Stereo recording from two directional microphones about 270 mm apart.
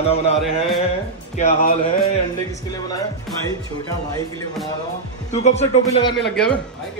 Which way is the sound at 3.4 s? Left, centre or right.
Centre.